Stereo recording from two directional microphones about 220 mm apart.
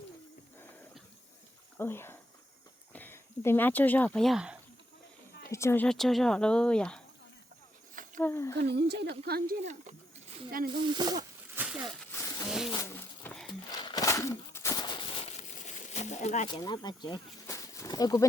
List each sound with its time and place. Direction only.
0.6 s horse: 10° left (ahead or behind)
1.8 s speech: 10° left (ahead or behind)
5.5 s speech: 10° left (ahead or behind)
8.2 s speech: 10° left (ahead or behind)
8.5 s speech: 50° right (ahead or behind)
9.6 s a sound: 35° right (ahead or behind)
10.7 s speech: 20° right (ahead or behind)
11.5 s a sound: 10° right (ahead or behind)
12.1 s a sound: 10° left (ahead or behind)
12.5 s speech: centre (ahead or behind)
12.7 s a sound: 15° left (ahead or behind); by 16.5 s 30° left (ahead or behind)
16.5 s speech: 20° left (ahead or behind)